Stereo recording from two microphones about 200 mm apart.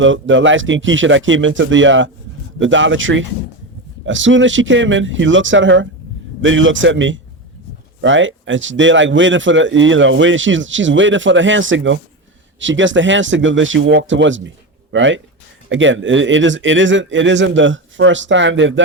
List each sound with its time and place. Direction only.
0.0 s speech: 70° right (ahead or behind)